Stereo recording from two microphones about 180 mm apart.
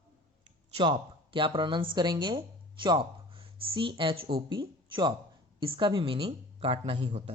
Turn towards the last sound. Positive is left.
turn(degrees=-35)  # may be behind; listen again after turning